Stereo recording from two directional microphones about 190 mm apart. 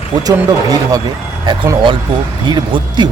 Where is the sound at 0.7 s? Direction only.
20° right (ahead or behind).